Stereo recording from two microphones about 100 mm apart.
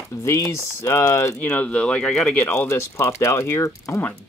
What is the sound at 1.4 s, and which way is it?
Speech, 15° left (ahead or behind).